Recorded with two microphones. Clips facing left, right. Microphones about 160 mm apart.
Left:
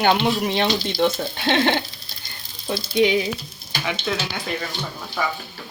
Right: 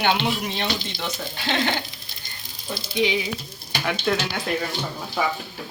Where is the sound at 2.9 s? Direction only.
50° left (ahead or behind).